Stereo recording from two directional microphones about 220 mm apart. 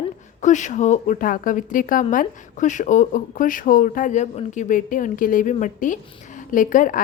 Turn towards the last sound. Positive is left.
turn(degrees=35)  # may be behind; listen again after turning